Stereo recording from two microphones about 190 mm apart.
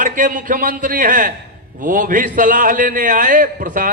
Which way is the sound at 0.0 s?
45° right (ahead or behind).